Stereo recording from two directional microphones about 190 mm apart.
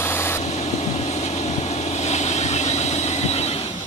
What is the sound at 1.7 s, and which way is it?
Train, 35° left (ahead or behind).